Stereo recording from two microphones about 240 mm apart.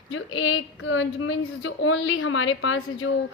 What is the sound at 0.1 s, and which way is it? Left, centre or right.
A woman's voice, left.